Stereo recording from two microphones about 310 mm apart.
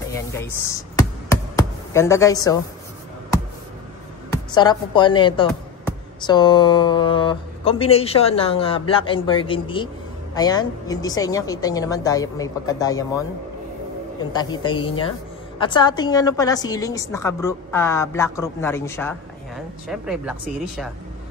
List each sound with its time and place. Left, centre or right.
0.9 s computer keyboard: centre
4.3 s a woman's voice: centre
14.3 s a woman's voice: centre